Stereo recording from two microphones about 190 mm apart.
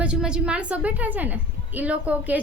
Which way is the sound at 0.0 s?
5° right (ahead or behind).